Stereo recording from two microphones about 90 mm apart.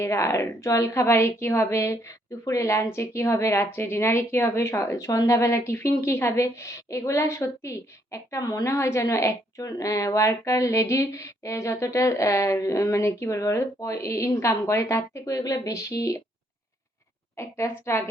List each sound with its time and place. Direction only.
0.0 s speech: 35° left (ahead or behind)
17.3 s speech: 30° left (ahead or behind)